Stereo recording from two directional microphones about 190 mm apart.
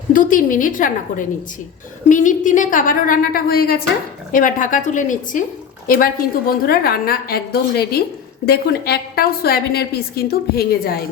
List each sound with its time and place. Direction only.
0.1 s a woman's voice: 45° left (ahead or behind)